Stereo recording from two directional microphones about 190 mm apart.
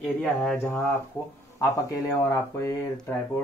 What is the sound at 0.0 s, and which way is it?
Speech, centre (ahead or behind).